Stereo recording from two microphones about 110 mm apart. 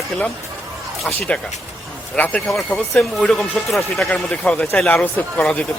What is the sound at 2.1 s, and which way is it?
Speech, 15° left (ahead or behind).